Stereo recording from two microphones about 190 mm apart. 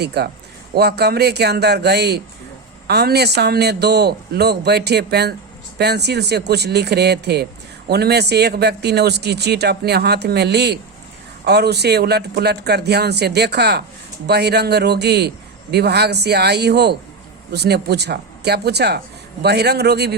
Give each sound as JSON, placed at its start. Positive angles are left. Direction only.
{"t": 0.0, "sound": "speech", "side_deg": -60}